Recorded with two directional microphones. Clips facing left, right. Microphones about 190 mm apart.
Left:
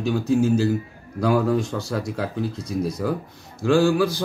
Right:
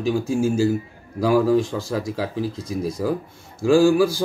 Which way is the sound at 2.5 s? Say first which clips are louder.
Even; 25° right (ahead or behind).